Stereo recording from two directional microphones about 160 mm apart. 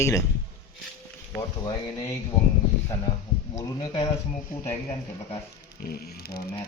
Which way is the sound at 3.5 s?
25° left (ahead or behind).